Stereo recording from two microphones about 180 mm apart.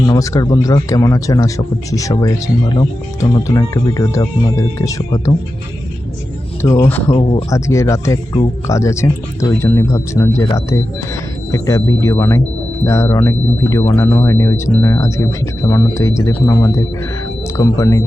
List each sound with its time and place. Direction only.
0.0 s speech: 20° left (ahead or behind)
6.6 s speech: 15° left (ahead or behind)
7.2 s speech: 30° left (ahead or behind)
7.5 s speech: 15° left (ahead or behind)